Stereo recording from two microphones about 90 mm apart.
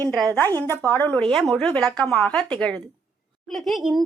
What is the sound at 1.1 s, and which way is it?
Speech, 10° left (ahead or behind).